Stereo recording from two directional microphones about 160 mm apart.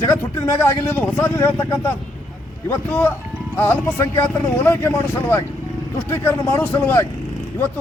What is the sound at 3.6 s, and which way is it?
Speech, 15° left (ahead or behind).